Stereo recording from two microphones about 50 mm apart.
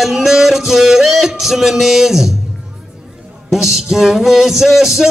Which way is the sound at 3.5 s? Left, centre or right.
Centre.